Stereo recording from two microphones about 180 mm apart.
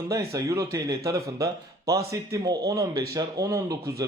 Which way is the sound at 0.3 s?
20° right (ahead or behind).